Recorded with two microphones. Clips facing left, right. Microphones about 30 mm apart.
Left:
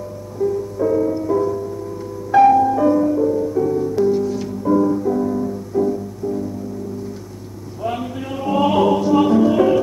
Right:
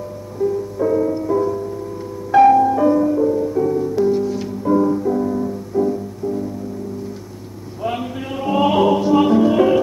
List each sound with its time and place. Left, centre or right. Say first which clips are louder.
0.4 s music: even; centre
0.7 s music: even; right
3.2 s music: right 1 dB; right
7.8 s music: right 1 dB; right